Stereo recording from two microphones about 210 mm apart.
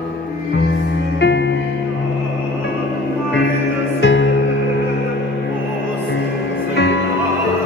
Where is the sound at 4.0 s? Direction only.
60° left (ahead or behind).